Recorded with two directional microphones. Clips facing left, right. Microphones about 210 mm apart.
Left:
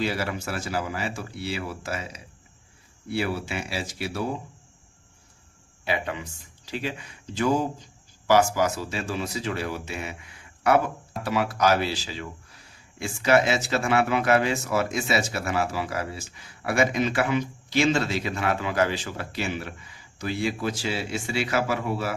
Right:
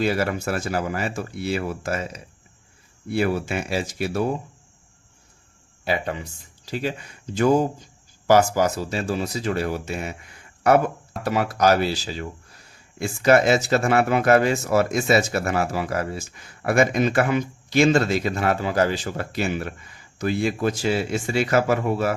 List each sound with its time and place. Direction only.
0.0 s speech: 50° right (ahead or behind)
5.8 s speech: 35° right (ahead or behind)